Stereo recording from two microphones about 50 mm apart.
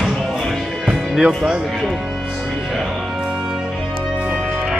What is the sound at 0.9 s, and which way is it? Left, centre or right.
Music, centre.